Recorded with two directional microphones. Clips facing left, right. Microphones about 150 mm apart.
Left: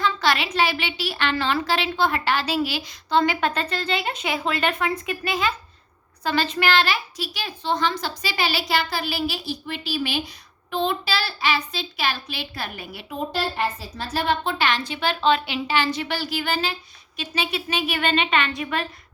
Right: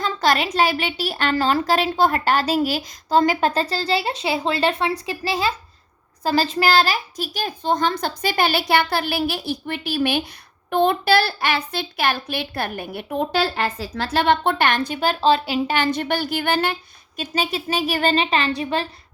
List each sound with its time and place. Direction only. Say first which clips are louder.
0.0 s a woman's voice: right 2 dB; 40° right (ahead or behind)
13.3 s a woman's voice: right 1 dB; 90° right; by 16.7 s 60° right (ahead or behind)
17.2 s a woman's voice: right 3 dB; 40° right (ahead or behind)